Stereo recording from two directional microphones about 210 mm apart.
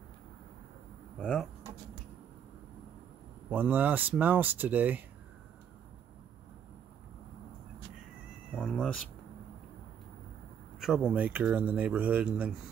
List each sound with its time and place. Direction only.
1.2 s speech: centre (ahead or behind)
3.4 s speech: 10° right (ahead or behind)
8.5 s speech: 5° left (ahead or behind)
10.8 s speech: 5° right (ahead or behind)